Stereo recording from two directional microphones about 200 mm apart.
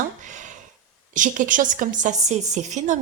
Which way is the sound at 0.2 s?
40° right (ahead or behind).